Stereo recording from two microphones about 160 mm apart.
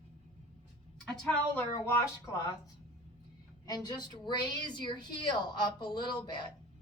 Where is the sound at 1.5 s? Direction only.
15° left (ahead or behind).